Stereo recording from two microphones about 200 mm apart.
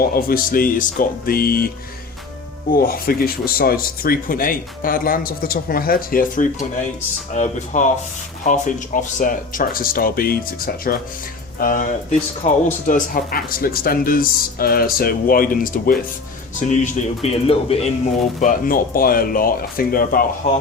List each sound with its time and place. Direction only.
0.1 s speech: 45° left (ahead or behind)
2.7 s speech: 45° left (ahead or behind)
11.6 s speech: 45° left (ahead or behind)
12.9 s speech: 45° left (ahead or behind)